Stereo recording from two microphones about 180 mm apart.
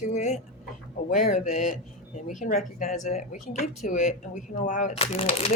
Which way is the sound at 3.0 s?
40° left (ahead or behind).